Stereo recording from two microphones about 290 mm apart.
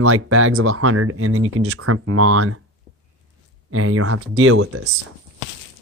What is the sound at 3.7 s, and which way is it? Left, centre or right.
Speech, right.